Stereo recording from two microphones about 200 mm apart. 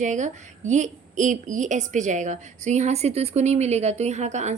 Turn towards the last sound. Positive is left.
turn(degrees=-35)  # may be behind; listen again after turning